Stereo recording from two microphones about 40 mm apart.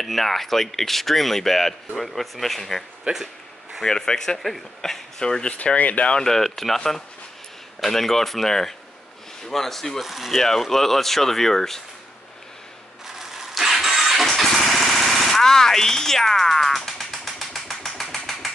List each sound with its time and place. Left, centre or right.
0.0 s speech: centre
3.1 s speech: right
3.8 s speech: centre
4.4 s speech: centre
5.2 s speech: centre
5.8 s speech: left
6.2 s speech: centre
7.8 s speech: centre
10.0 s speech: centre
10.4 s speech: centre
13.0 s engine starting: centre
15.4 s music: centre
18.1 s mechanisms: centre